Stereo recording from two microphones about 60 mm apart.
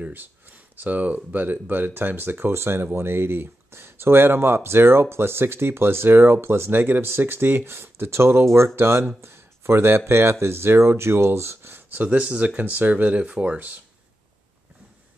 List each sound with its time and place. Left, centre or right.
0.1 s speech: right
11.9 s speech: right